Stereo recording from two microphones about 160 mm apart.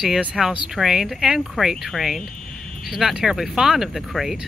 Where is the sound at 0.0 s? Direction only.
5° right (ahead or behind).